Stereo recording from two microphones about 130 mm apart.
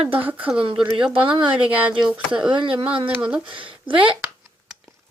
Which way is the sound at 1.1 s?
40° right (ahead or behind).